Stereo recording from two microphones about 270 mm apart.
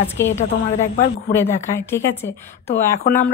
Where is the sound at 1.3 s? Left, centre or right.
Centre.